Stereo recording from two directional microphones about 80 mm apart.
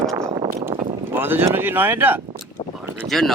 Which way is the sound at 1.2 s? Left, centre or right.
Right.